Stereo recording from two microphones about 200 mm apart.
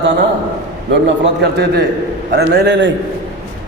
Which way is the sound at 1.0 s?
55° right (ahead or behind).